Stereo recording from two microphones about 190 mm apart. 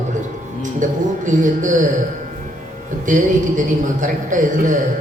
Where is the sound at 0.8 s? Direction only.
40° right (ahead or behind).